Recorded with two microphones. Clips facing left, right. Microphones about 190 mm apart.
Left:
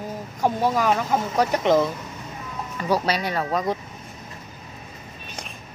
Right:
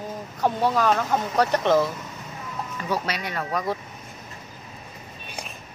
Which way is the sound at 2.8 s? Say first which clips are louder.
Left 6 dB; 35° left (ahead or behind).